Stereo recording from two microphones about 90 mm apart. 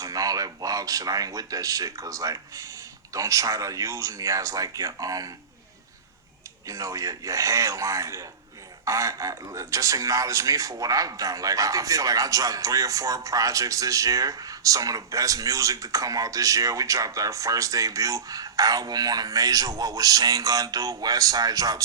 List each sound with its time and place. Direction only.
0.0 s speech: 40° right (ahead or behind)
6.7 s speech: 40° right (ahead or behind)